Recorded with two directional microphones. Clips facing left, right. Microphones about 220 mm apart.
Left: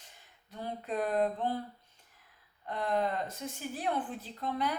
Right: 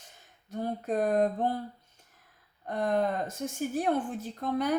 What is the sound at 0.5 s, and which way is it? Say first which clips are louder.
Speech: right 6 dB; 45° right (ahead or behind).